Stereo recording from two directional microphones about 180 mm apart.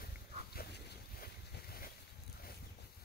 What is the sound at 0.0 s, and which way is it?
Boat, 60° left (ahead or behind).